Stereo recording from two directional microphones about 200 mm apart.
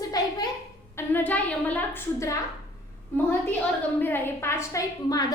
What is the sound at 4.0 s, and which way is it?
A woman's voice, 10° left (ahead or behind).